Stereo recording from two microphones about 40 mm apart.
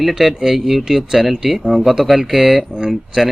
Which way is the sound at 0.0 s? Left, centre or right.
Centre.